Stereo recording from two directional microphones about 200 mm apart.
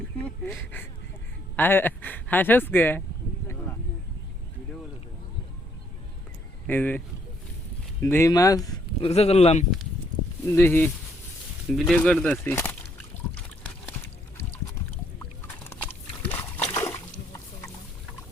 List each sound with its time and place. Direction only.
0.2 s speech: 10° left (ahead or behind)
6.7 s speech: 10° left (ahead or behind)
8.0 s speech: 15° left (ahead or behind)
9.0 s speech: 30° left (ahead or behind)
10.4 s speech: 10° left (ahead or behind)
15.9 s splash: 10° left (ahead or behind)